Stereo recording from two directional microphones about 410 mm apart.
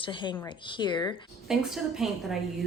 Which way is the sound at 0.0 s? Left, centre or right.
Centre.